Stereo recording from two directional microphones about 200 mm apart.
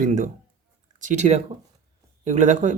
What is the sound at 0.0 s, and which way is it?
Speech, 40° right (ahead or behind).